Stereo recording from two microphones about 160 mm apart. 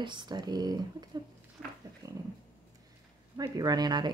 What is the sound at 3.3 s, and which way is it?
Speech, 25° right (ahead or behind).